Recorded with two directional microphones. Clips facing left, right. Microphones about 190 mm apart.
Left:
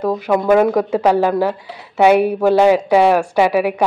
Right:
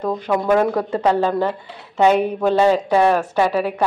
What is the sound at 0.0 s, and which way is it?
A woman's voice, 10° left (ahead or behind).